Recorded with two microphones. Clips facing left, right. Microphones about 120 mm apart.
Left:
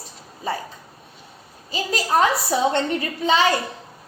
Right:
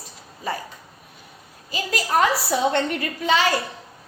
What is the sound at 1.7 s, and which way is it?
A woman's voice, 30° left (ahead or behind).